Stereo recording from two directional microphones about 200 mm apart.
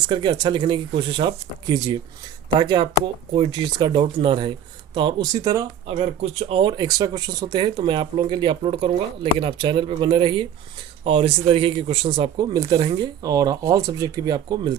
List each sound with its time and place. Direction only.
0.1 s speech: 20° right (ahead or behind)
5.8 s speech: 30° right (ahead or behind)